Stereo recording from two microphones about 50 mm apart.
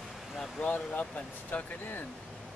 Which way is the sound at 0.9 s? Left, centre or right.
Left.